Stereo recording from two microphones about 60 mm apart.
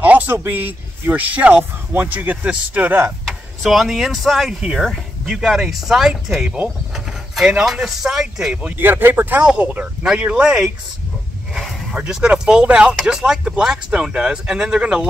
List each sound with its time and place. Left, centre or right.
0.0 s a sound: right
0.4 s speech: right
3.3 s speech: centre
4.7 s speech: centre
7.6 s speech: centre
8.6 s speech: right
10.0 s speech: centre
11.9 s speech: centre